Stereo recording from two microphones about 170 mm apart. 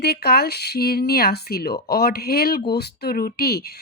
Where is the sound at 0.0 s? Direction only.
70° left (ahead or behind).